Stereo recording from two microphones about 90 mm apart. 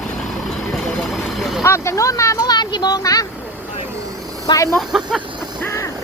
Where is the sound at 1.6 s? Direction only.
30° left (ahead or behind).